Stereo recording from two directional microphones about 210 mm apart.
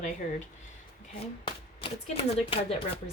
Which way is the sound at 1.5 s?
25° left (ahead or behind).